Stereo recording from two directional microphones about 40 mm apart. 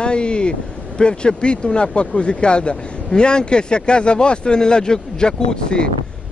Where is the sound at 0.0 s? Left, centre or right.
Left.